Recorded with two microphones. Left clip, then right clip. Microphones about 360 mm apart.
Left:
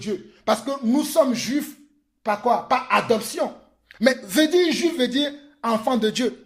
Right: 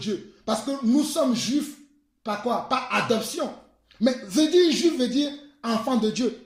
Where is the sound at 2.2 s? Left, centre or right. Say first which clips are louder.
Left 6 dB; centre.